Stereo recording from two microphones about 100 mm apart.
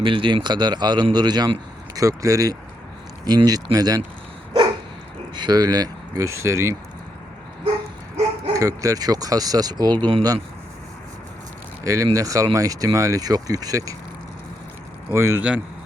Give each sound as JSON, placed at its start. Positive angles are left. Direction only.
{"t": 0.0, "sound": "a man's voice", "side_deg": -60}
{"t": 2.0, "sound": "speech", "side_deg": -35}
{"t": 5.3, "sound": "speech", "side_deg": -50}
{"t": 8.1, "sound": "speech", "side_deg": -35}
{"t": 11.8, "sound": "speech", "side_deg": -35}
{"t": 15.1, "sound": "a man's voice", "side_deg": -25}
{"t": 15.4, "sound": "speech", "side_deg": -10}